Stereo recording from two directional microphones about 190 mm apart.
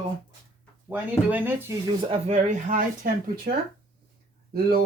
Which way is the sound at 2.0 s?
30° right (ahead or behind).